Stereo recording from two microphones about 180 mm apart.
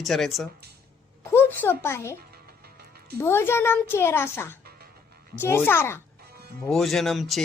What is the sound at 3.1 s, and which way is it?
Speech, 15° left (ahead or behind).